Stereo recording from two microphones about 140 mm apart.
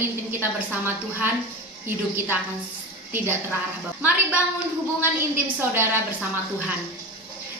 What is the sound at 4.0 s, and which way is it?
Speech, 10° right (ahead or behind).